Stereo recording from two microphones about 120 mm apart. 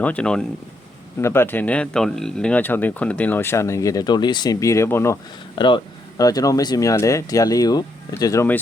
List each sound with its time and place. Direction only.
0.0 s speech: 10° left (ahead or behind)
1.2 s speech: 20° left (ahead or behind); by 4.5 s 35° left (ahead or behind)
4.6 s speech: 25° left (ahead or behind)
5.5 s speech: 40° left (ahead or behind); by 8.4 s 25° left (ahead or behind)